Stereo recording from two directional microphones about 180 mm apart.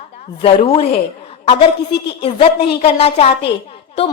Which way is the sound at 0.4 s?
35° left (ahead or behind).